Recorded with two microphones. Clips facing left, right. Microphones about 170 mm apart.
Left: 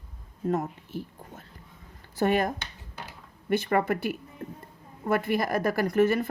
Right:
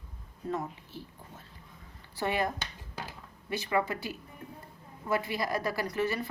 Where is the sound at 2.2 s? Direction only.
45° left (ahead or behind).